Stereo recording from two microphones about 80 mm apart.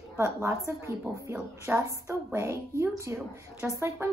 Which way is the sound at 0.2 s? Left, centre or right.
Right.